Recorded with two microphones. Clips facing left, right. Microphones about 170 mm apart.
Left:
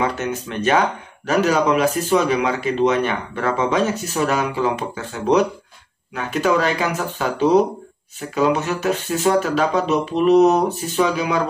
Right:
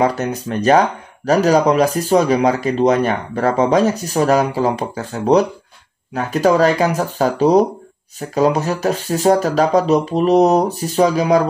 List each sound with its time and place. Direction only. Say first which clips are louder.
0.0 s speech: right 5 dB; 40° right (ahead or behind)